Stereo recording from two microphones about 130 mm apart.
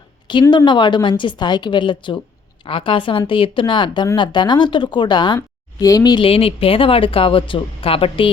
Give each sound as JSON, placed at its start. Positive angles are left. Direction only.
{"t": 0.5, "sound": "a woman's voice", "side_deg": 35}
{"t": 6.2, "sound": "speech", "side_deg": 45}